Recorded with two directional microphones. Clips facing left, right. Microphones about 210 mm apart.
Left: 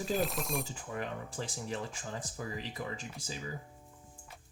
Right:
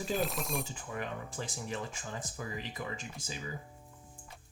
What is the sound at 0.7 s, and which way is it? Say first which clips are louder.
Speech: left 1 dB; 35° left (ahead or behind).